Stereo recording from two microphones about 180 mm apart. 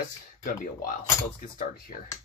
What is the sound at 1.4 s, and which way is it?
Speech, 50° left (ahead or behind).